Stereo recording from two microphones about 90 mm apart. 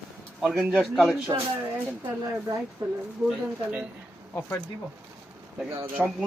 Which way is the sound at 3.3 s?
15° right (ahead or behind).